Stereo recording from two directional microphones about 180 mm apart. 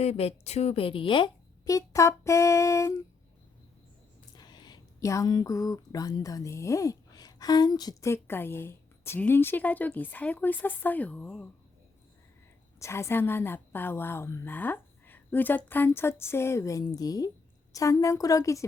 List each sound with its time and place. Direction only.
0.0 s speech: 35° left (ahead or behind); by 3.0 s 15° left (ahead or behind)
4.4 s speech: 25° left (ahead or behind); by 11.4 s 10° left (ahead or behind)
12.8 s speech: 15° left (ahead or behind)